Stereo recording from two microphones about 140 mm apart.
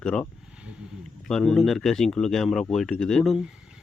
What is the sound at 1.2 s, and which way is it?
Speech, 5° left (ahead or behind).